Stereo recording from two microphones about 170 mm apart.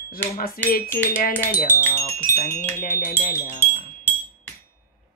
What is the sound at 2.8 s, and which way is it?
Speech, 55° left (ahead or behind).